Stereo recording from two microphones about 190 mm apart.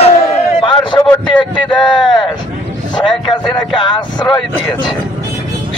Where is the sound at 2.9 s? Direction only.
25° left (ahead or behind).